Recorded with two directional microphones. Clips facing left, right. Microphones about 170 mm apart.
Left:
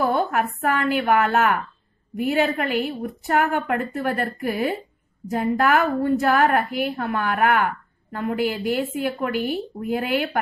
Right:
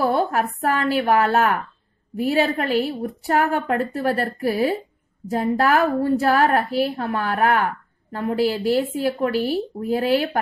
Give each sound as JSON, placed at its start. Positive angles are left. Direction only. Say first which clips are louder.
{"t": 0.0, "sound": "a woman's voice", "louder": "right 1 dB", "side_deg": -35}